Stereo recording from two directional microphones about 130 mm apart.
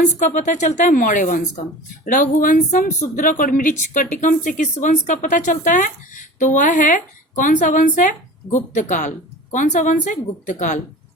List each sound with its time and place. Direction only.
0.0 s speech: 70° left (ahead or behind)
2.0 s speech: 90° left; by 10.8 s 75° left (ahead or behind)